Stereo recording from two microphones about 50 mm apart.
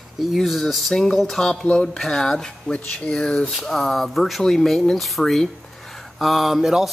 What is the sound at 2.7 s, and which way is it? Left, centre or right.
Speech, left.